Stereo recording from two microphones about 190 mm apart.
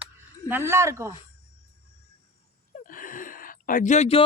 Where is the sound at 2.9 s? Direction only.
45° left (ahead or behind).